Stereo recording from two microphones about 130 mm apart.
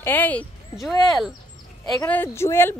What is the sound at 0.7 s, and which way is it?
Speech, centre (ahead or behind).